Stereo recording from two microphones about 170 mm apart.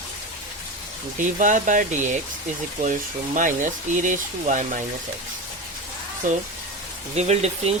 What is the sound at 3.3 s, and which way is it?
Speech, 50° right (ahead or behind).